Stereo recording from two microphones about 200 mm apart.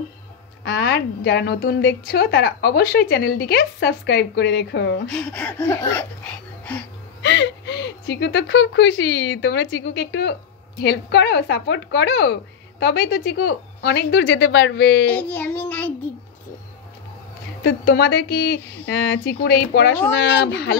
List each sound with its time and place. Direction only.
0.7 s a woman's voice: 55° left (ahead or behind)
5.0 s speech: 5° left (ahead or behind)
7.2 s a woman's voice: 65° left (ahead or behind)
15.0 s speech: 10° left (ahead or behind)
17.6 s a woman's voice: 55° left (ahead or behind)